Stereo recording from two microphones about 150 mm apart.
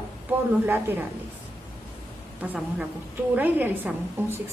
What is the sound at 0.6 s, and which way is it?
Speech, 15° right (ahead or behind).